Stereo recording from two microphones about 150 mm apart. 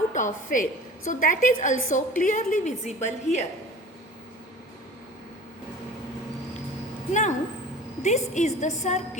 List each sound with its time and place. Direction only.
0.1 s a woman's voice: 60° left (ahead or behind)
7.1 s a sound: 55° left (ahead or behind)
8.0 s a woman's voice: 50° left (ahead or behind)